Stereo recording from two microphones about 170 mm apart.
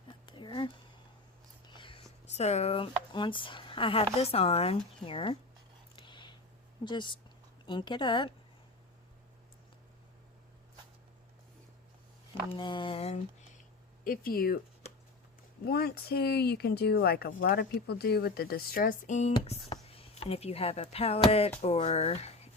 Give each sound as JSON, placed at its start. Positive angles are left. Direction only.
{"t": 0.3, "sound": "a sound", "side_deg": 25}
{"t": 1.6, "sound": "speech", "side_deg": 30}
{"t": 6.0, "sound": "a sound", "side_deg": 30}
{"t": 6.8, "sound": "speech", "side_deg": 30}
{"t": 12.5, "sound": "speech", "side_deg": 25}
{"t": 14.0, "sound": "speech", "side_deg": 55}
{"t": 15.6, "sound": "speech", "side_deg": 70}
{"t": 19.7, "sound": "speech", "side_deg": 35}